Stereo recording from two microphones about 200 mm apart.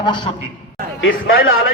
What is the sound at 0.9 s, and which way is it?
Speech, 75° left (ahead or behind).